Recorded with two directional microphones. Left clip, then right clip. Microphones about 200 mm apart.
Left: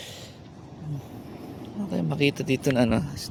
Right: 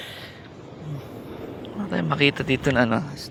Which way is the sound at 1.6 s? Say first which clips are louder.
Right 4 dB; 15° left (ahead or behind).